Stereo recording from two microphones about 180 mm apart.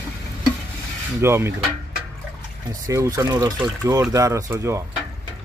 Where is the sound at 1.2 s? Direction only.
15° right (ahead or behind).